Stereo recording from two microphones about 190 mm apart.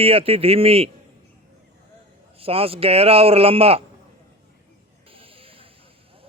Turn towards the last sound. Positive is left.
turn(degrees=-30)  # may be behind; listen again after turning